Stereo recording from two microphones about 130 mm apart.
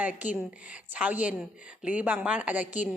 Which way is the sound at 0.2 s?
10° right (ahead or behind).